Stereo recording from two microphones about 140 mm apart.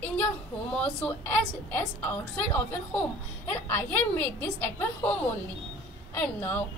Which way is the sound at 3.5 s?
10° left (ahead or behind).